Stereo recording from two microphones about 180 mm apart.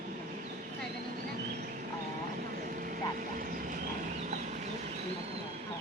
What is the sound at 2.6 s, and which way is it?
Vehicle, 50° right (ahead or behind).